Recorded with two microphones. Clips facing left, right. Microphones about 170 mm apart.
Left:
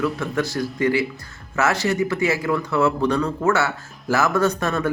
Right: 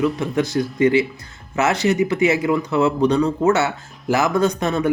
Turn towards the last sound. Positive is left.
turn(degrees=-20)  # may be behind; listen again after turning